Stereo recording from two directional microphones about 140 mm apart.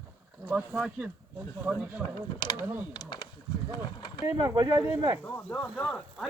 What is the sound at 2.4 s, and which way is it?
Speech, 30° left (ahead or behind).